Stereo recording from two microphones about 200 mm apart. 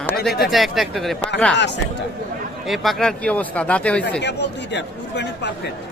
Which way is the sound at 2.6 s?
Centre (ahead or behind).